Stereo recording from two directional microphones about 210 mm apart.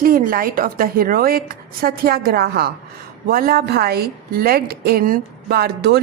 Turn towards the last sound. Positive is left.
turn(degrees=-50)  # may be behind; listen again after turning